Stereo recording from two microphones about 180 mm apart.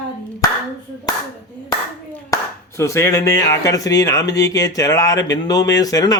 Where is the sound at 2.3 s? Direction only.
20° left (ahead or behind).